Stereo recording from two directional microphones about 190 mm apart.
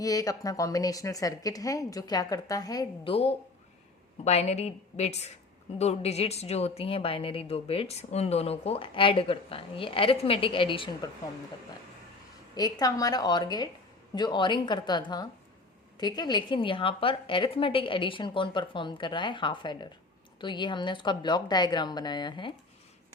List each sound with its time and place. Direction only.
0.0 s a woman's voice: 20° left (ahead or behind)
12.5 s a woman's voice: 20° left (ahead or behind)